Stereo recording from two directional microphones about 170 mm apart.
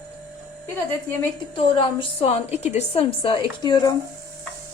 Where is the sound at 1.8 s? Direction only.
35° left (ahead or behind).